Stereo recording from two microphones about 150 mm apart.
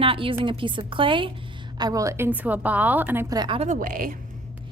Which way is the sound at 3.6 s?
55° right (ahead or behind).